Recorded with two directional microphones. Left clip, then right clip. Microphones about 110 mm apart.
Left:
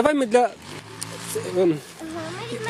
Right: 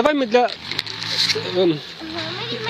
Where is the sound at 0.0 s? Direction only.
15° left (ahead or behind).